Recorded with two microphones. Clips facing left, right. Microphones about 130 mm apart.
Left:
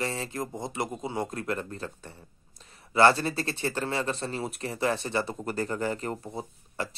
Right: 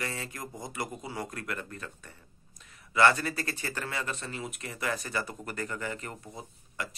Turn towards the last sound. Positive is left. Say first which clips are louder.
# left 5 dB
turn(degrees=30)  # may be behind; listen again after turning